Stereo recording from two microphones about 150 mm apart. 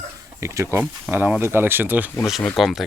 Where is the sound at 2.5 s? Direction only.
Centre (ahead or behind).